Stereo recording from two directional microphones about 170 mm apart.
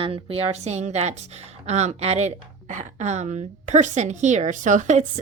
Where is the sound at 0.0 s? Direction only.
35° right (ahead or behind).